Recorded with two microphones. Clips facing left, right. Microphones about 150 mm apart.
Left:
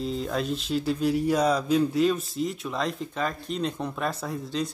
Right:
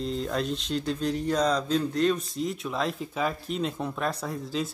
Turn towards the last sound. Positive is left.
turn(degrees=0)  # may be behind; listen again after turning